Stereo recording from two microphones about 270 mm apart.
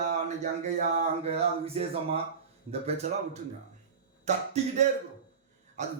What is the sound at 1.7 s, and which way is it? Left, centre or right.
Speech, right.